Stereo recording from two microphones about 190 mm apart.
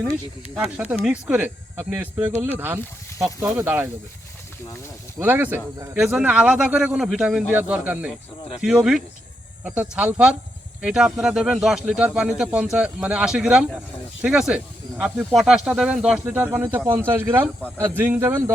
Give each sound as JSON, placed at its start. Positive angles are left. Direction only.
{"t": 0.5, "sound": "speech", "side_deg": -5}
{"t": 5.2, "sound": "speech", "side_deg": -10}